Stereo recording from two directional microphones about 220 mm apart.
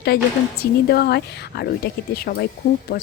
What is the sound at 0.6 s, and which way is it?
Speech, 45° left (ahead or behind).